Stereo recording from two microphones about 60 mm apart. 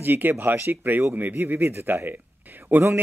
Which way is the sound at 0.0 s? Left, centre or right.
Right.